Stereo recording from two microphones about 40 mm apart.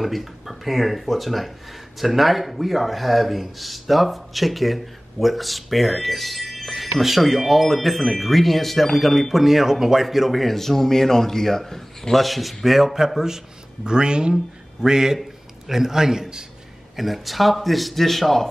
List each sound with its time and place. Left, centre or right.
0.0 s speech: centre
13.8 s a man's voice: right
16.9 s speech: centre